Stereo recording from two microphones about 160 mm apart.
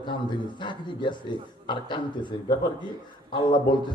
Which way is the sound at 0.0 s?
30° left (ahead or behind).